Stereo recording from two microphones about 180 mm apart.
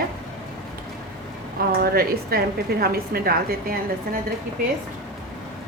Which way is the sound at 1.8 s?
60° right (ahead or behind).